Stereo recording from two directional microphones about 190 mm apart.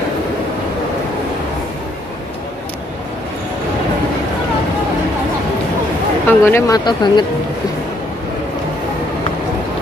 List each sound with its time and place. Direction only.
6.2 s speech: 15° left (ahead or behind)